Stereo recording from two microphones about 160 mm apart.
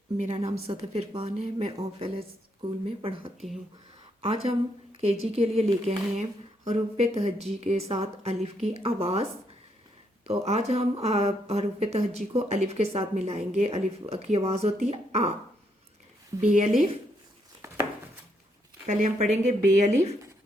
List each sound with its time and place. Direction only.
0.2 s speech: 40° right (ahead or behind)
10.2 s speech: 40° right (ahead or behind)
16.5 s speech: 55° right (ahead or behind)
18.9 s speech: 50° right (ahead or behind)